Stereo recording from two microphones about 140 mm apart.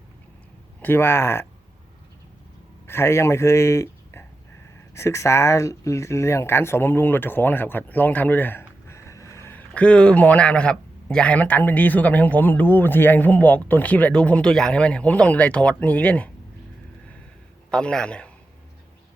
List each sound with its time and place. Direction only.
0.8 s speech: 15° left (ahead or behind)
2.8 s speech: 15° left (ahead or behind)
17.7 s speech: 5° left (ahead or behind)